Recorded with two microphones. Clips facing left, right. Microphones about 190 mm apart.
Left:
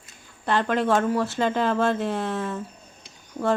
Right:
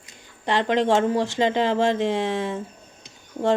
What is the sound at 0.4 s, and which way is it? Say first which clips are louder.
Speech: right 2 dB; 20° right (ahead or behind).